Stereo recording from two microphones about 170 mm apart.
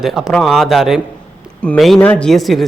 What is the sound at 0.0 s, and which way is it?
Speech, centre (ahead or behind).